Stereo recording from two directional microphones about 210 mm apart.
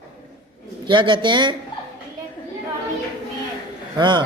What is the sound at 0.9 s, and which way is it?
Speech, 25° right (ahead or behind).